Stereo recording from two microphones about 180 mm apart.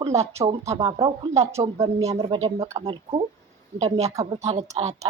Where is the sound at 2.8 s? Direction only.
30° right (ahead or behind).